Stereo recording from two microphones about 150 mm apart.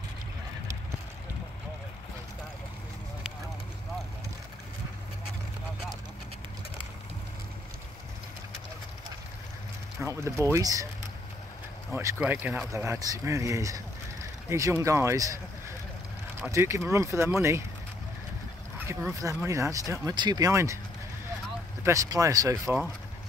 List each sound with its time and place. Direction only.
9.9 s speech: 20° right (ahead or behind)
11.9 s speech: 20° right (ahead or behind)
18.8 s speech: 15° right (ahead or behind)
21.8 s speech: 20° right (ahead or behind)